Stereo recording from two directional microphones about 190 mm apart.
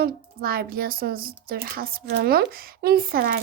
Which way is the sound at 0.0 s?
50° right (ahead or behind).